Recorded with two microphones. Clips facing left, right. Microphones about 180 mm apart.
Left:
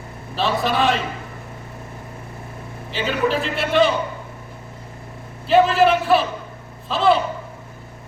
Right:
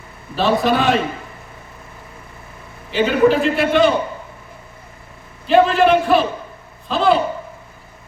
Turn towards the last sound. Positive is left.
turn(degrees=0)  # may be behind; listen again after turning